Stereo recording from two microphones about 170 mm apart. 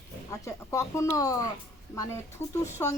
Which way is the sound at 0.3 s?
20° left (ahead or behind).